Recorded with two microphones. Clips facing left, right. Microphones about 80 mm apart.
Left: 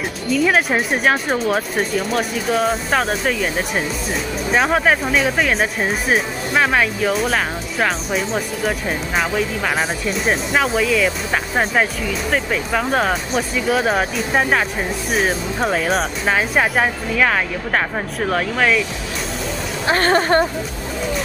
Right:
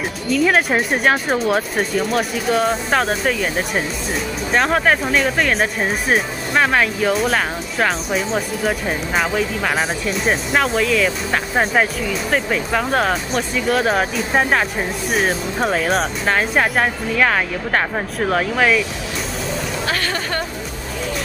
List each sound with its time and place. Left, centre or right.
0.3 s speech: centre
19.9 s speech: left